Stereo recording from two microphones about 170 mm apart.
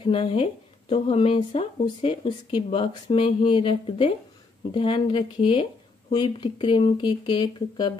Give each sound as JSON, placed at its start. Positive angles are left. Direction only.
{"t": 0.0, "sound": "speech", "side_deg": 30}